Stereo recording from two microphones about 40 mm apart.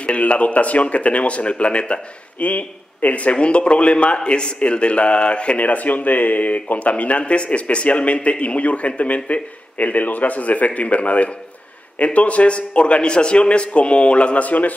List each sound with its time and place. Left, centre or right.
0.0 s speech: left
2.3 s a man's voice: left